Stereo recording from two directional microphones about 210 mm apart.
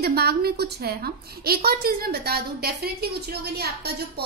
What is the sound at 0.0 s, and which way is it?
A woman's voice, 50° right (ahead or behind).